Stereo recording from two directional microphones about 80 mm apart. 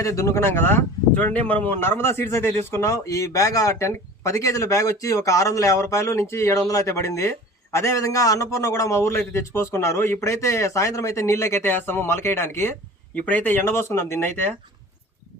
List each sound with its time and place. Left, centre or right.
0.0 s speech: left
2.9 s speech: left
13.1 s speech: centre